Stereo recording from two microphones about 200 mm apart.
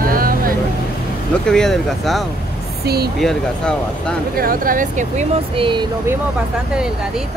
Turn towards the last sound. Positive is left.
turn(degrees=-5)  # may be behind; listen again after turning